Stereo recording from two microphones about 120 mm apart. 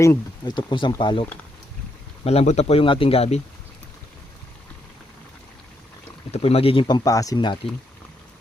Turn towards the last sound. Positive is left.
turn(degrees=40)  # may be behind; listen again after turning